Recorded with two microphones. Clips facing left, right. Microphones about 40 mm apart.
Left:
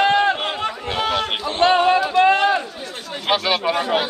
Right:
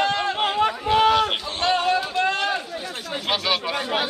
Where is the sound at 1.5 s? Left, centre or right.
Left.